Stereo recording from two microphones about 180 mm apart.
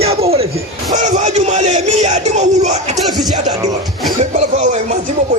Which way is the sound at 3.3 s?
20° right (ahead or behind).